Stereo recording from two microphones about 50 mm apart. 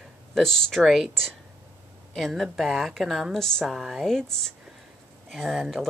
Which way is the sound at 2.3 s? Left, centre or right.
Centre.